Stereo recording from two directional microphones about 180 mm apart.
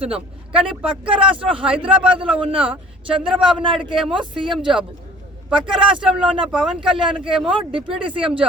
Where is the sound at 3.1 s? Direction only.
5° right (ahead or behind).